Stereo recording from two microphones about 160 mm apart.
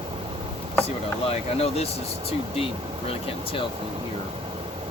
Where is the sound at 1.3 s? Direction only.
40° left (ahead or behind).